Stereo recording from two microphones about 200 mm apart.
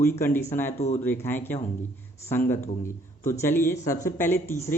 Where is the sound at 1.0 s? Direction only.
10° left (ahead or behind).